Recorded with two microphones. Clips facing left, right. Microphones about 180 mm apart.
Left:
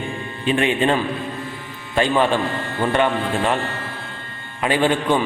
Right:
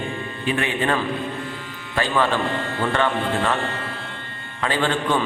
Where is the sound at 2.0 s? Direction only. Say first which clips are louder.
Left 3 dB; 20° left (ahead or behind).